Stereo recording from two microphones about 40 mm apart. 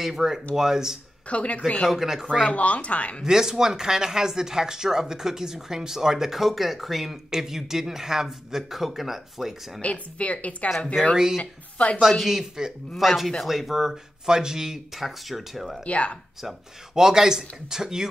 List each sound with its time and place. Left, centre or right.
0.0 s speech: centre
1.3 s speech: left
1.9 s speech: centre
2.4 s speech: left
3.3 s speech: centre
9.8 s speech: left
11.0 s speech: centre
12.0 s speech: centre
12.9 s speech: centre
15.8 s speech: left
16.9 s speech: centre